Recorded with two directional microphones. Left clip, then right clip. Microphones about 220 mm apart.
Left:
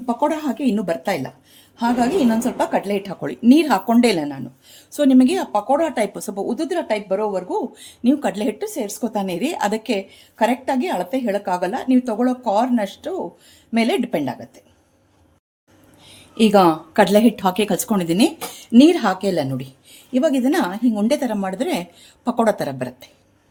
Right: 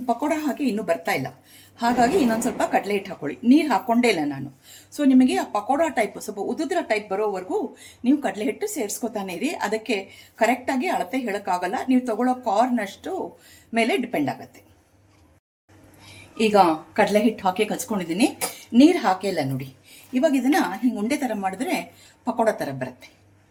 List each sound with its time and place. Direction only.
0.0 s a woman's voice: 40° left (ahead or behind)
7.8 s a woman's voice: 40° left (ahead or behind)
16.4 s a woman's voice: 50° left (ahead or behind)